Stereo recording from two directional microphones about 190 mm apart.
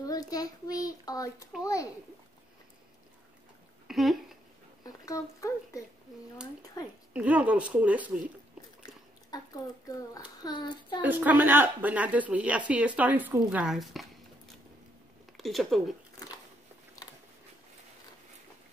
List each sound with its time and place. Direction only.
0.0 s a child's voice: 20° left (ahead or behind)
3.8 s a sound: centre (ahead or behind)
4.8 s speech: 15° left (ahead or behind)
7.2 s a woman's voice: 5° right (ahead or behind)
9.3 s a child's voice: 20° left (ahead or behind)
11.0 s a woman's voice: 10° right (ahead or behind)
15.3 s speech: centre (ahead or behind)